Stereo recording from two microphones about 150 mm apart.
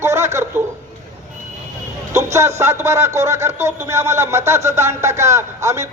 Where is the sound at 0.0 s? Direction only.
20° right (ahead or behind).